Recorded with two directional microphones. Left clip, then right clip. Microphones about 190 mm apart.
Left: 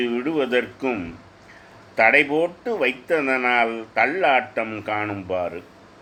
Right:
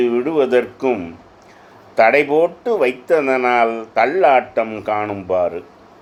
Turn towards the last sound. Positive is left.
turn(degrees=-15)  # may be behind; listen again after turning